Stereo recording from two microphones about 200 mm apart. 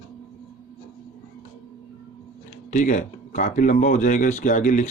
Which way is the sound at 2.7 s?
40° left (ahead or behind).